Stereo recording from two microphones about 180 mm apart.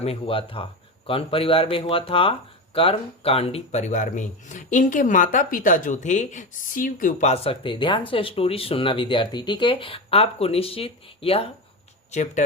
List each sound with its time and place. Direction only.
0.0 s speech: 30° left (ahead or behind)